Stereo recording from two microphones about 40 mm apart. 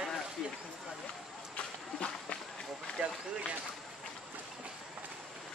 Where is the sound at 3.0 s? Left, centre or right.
Right.